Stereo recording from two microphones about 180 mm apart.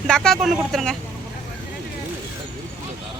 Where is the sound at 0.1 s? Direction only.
5° left (ahead or behind).